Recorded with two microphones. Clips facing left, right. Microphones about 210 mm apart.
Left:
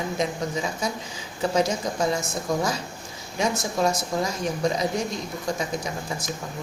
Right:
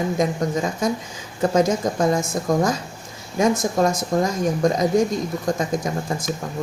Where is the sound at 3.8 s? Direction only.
50° right (ahead or behind).